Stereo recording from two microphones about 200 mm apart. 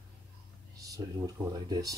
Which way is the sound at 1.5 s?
20° right (ahead or behind).